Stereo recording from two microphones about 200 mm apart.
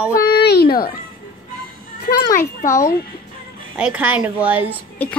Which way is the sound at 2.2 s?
15° left (ahead or behind).